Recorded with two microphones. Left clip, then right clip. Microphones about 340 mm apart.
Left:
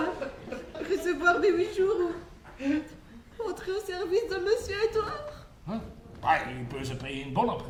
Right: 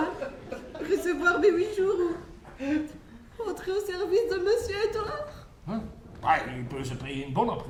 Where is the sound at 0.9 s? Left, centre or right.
Centre.